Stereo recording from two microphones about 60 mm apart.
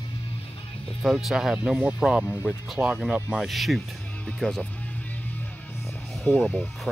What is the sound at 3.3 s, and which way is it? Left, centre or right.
Speech, centre.